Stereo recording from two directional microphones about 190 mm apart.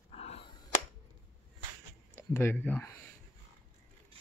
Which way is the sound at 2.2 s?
10° left (ahead or behind).